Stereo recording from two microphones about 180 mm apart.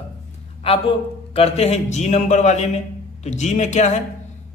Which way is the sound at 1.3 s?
35° left (ahead or behind).